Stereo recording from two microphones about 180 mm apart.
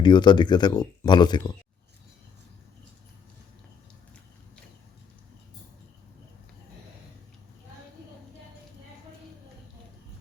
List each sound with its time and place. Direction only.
0.0 s speech: 25° left (ahead or behind)